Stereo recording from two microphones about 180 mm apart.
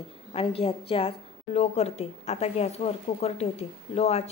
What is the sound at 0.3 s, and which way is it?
Speech, 30° left (ahead or behind).